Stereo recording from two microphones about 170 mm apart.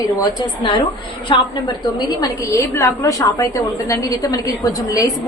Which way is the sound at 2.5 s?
15° left (ahead or behind).